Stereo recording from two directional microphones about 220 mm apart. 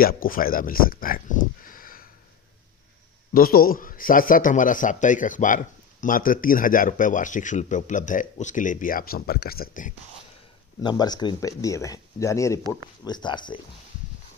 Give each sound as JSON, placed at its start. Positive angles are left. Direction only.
{"t": 0.0, "sound": "speech", "side_deg": 40}
{"t": 3.3, "sound": "a man's voice", "side_deg": 40}
{"t": 10.8, "sound": "speech", "side_deg": 20}